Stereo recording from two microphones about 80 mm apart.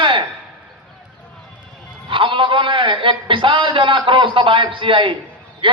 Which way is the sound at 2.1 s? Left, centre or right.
Right.